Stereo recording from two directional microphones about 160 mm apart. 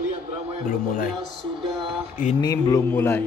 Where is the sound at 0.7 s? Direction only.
60° left (ahead or behind).